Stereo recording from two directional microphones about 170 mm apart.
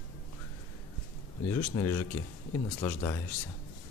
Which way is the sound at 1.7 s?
15° left (ahead or behind).